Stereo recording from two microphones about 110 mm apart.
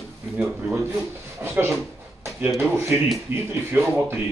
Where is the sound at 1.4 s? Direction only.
20° right (ahead or behind).